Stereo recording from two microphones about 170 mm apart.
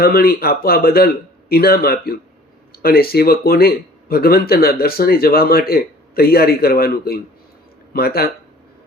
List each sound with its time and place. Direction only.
0.0 s speech: 60° left (ahead or behind)